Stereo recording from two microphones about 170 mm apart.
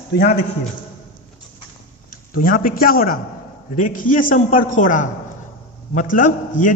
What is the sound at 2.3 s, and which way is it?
A man's voice, 55° left (ahead or behind).